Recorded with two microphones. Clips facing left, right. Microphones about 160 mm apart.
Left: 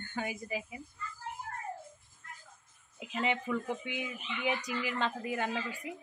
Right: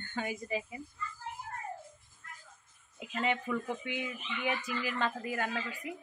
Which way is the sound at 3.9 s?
15° left (ahead or behind).